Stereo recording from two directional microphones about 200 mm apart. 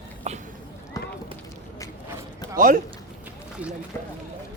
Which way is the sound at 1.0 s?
15° left (ahead or behind).